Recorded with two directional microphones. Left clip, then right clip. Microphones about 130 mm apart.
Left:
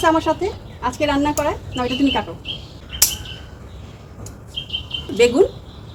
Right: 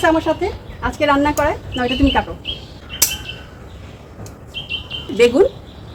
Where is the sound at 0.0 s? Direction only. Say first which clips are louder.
Right 1 dB; 10° right (ahead or behind).